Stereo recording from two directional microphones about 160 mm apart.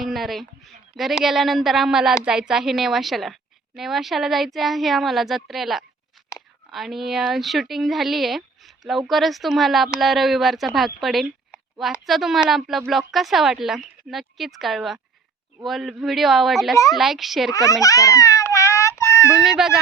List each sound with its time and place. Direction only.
0.0 s a sound: centre (ahead or behind)
0.9 s speech: centre (ahead or behind)
17.5 s baby laughter: 20° left (ahead or behind)
19.4 s speech: 5° right (ahead or behind)